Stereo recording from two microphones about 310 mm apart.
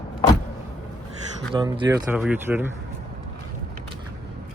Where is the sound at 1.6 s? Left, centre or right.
Centre.